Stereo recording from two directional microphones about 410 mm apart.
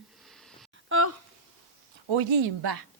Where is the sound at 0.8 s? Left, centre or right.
Right.